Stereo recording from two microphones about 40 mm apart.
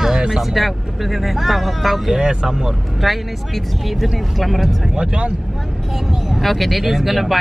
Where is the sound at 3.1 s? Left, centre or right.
Centre.